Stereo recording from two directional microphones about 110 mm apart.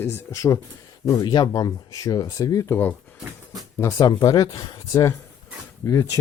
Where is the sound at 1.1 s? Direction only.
40° left (ahead or behind); by 2.9 s 20° left (ahead or behind).